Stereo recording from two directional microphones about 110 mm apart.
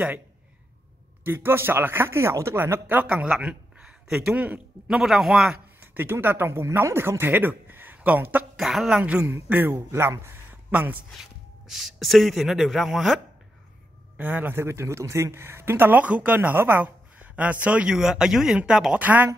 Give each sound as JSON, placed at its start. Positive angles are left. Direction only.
{"t": 1.2, "sound": "speech", "side_deg": -20}
{"t": 5.8, "sound": "speech", "side_deg": -20}
{"t": 8.5, "sound": "a man's voice", "side_deg": -5}
{"t": 11.6, "sound": "speech", "side_deg": 0}
{"t": 14.1, "sound": "a man's voice", "side_deg": -15}